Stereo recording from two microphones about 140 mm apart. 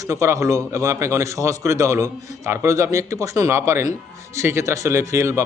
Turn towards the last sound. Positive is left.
turn(degrees=-20)  # may be behind; listen again after turning